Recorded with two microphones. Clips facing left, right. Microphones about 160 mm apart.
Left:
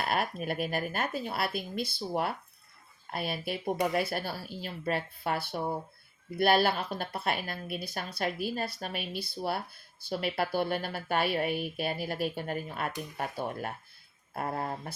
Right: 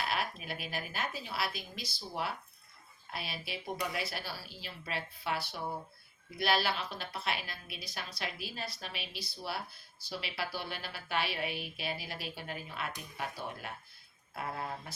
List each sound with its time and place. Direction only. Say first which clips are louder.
0.0 s speech: left 5 dB; 50° left (ahead or behind)